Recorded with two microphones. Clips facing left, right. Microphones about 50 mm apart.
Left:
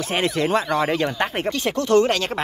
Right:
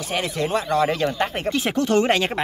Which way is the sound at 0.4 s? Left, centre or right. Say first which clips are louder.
Right 1 dB; left.